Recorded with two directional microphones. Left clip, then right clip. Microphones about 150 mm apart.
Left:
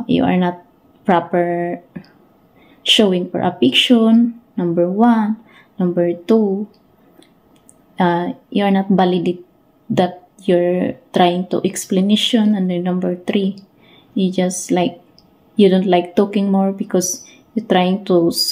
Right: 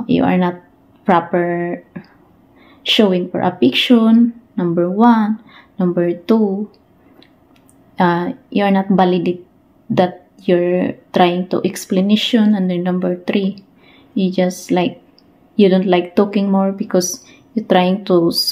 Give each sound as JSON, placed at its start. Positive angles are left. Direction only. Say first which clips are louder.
{"t": 0.1, "sound": "speech", "louder": "right 1 dB", "side_deg": 0}
{"t": 3.0, "sound": "speech", "louder": "right 1 dB", "side_deg": 10}
{"t": 7.9, "sound": "speech", "louder": "right 1 dB", "side_deg": 5}